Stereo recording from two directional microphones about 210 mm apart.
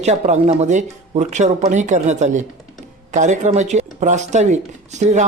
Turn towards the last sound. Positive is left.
turn(degrees=-35)  # may be behind; listen again after turning